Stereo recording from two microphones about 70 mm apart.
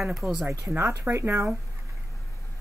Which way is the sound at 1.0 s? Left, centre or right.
Right.